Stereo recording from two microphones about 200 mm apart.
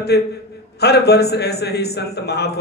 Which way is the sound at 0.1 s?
55° left (ahead or behind).